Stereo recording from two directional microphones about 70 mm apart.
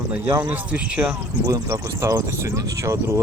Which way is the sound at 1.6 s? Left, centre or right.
Right.